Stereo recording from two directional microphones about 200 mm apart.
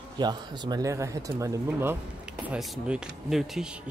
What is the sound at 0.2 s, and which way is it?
A man's voice, 20° right (ahead or behind).